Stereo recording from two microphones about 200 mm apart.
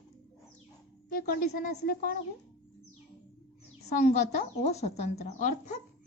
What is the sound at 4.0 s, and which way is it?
Speech, 35° left (ahead or behind).